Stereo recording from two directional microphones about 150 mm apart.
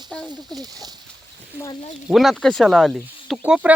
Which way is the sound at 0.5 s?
25° right (ahead or behind).